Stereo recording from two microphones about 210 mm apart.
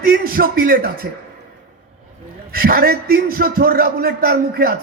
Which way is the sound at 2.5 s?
45° right (ahead or behind).